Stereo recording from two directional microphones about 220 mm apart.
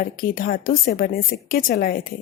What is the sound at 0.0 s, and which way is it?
A woman's voice, 40° left (ahead or behind).